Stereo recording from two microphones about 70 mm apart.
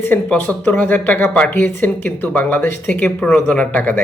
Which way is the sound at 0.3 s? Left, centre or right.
Left.